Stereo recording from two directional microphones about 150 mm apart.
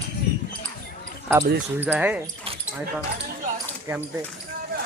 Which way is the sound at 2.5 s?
40° right (ahead or behind).